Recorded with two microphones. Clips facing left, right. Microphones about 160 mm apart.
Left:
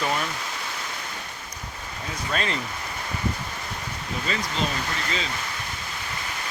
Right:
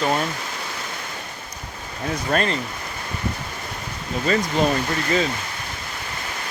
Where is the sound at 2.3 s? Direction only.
50° right (ahead or behind).